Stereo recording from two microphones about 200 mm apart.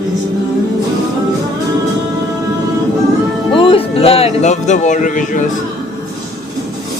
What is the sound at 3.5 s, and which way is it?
Speech, 30° left (ahead or behind).